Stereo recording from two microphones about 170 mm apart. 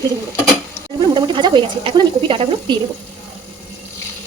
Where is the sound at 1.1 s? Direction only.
25° right (ahead or behind).